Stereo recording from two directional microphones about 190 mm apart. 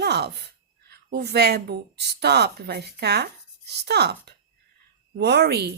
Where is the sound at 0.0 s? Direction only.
60° right (ahead or behind).